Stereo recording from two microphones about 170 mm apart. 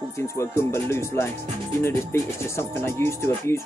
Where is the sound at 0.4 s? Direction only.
15° left (ahead or behind).